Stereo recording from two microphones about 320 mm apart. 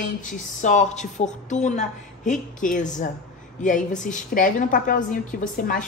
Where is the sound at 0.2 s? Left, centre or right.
Left.